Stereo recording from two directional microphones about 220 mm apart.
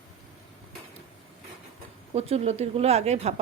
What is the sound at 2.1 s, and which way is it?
A woman's voice, 30° right (ahead or behind).